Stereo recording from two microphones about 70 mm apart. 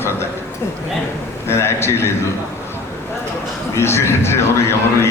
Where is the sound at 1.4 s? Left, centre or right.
Left.